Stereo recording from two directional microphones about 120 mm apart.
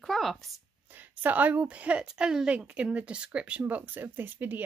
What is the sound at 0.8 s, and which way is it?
A woman's voice, 15° right (ahead or behind).